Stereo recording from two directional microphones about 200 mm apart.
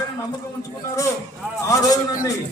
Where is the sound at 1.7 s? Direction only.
15° left (ahead or behind).